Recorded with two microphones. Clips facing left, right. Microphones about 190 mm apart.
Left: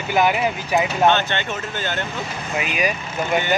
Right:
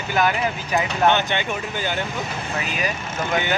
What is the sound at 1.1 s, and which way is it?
Speech, 15° right (ahead or behind).